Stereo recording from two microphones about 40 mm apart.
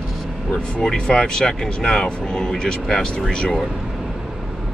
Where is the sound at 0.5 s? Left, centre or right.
Left.